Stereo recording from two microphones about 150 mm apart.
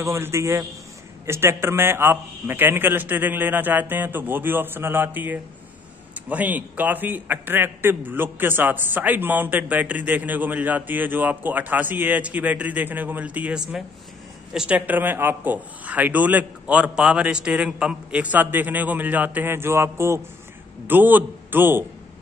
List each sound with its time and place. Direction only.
0.0 s a man's voice: 20° right (ahead or behind)